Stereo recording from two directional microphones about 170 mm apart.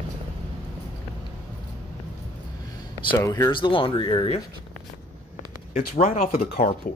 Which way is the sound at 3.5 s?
30° left (ahead or behind).